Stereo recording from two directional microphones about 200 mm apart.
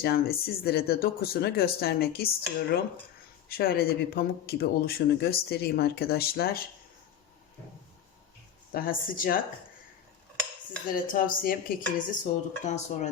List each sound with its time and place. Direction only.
0.0 s speech: 50° left (ahead or behind)
8.7 s speech: 45° left (ahead or behind)
10.8 s speech: 45° left (ahead or behind)